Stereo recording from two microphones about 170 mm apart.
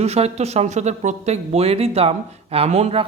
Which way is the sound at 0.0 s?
40° right (ahead or behind).